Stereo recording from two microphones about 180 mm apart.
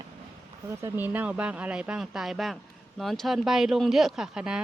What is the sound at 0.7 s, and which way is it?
Speech, 15° right (ahead or behind).